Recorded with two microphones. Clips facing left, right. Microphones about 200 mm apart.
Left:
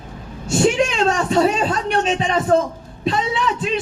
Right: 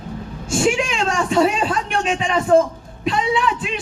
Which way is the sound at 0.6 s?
35° left (ahead or behind).